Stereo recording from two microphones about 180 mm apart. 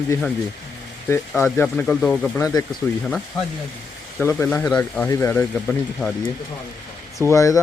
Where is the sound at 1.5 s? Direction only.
10° left (ahead or behind).